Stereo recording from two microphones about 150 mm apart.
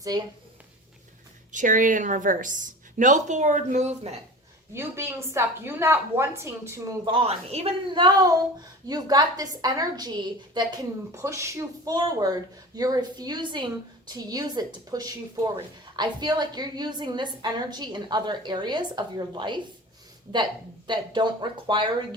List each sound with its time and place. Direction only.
0.1 s a woman's voice: 25° right (ahead or behind)
1.5 s a woman's voice: 60° right (ahead or behind)
4.7 s a woman's voice: 15° right (ahead or behind)
7.0 s a woman's voice: 35° right (ahead or behind)
8.0 s a woman's voice: 25° right (ahead or behind)